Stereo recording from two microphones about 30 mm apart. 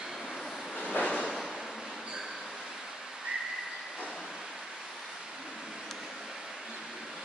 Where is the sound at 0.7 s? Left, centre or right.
Left.